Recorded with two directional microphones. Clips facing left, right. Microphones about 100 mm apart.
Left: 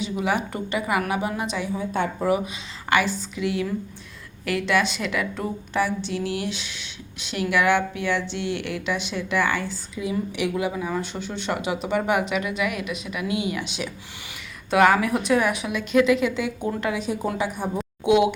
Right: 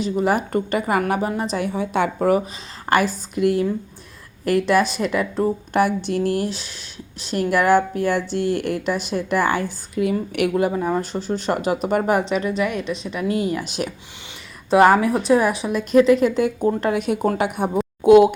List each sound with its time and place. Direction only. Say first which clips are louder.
0.0 s speech: right 5 dB; 40° right (ahead or behind)
1.5 s a woman's voice: right 4 dB; 65° right (ahead or behind); by 2.0 s 80° right
2.9 s speech: right 3 dB; 45° right (ahead or behind)
5.7 s speech: right 4 dB; 55° right (ahead or behind)
10.5 s speech: right 6 dB; 40° right (ahead or behind)
14.7 s speech: right 4 dB; 35° right (ahead or behind)
17.0 s a woman's voice: right 5 dB; 60° right (ahead or behind)
17.7 s a sound: right 8 dB; 45° right (ahead or behind)